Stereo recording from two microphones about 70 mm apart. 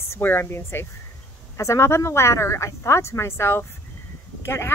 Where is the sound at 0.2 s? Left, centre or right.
Left.